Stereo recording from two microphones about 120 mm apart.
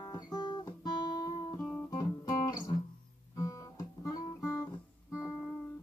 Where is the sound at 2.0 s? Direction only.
35° left (ahead or behind).